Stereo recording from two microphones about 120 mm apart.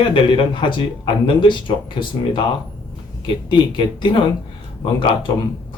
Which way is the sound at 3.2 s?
45° left (ahead or behind).